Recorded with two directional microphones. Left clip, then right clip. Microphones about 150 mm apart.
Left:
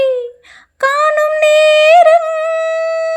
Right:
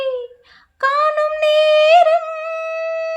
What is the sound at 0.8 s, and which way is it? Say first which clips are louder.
Music: left 4 dB; 30° left (ahead or behind).